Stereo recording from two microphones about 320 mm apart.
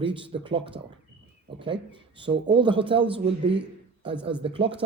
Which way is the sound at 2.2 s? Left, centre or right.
Centre.